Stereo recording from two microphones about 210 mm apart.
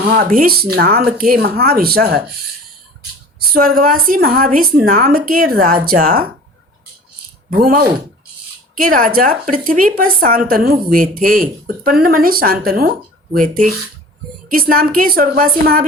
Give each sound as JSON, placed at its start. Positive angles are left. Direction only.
{"t": 0.0, "sound": "speech", "side_deg": -45}
{"t": 3.5, "sound": "speech", "side_deg": -45}
{"t": 7.6, "sound": "speech", "side_deg": -45}